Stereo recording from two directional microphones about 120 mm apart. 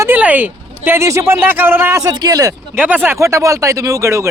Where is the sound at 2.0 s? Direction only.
35° right (ahead or behind).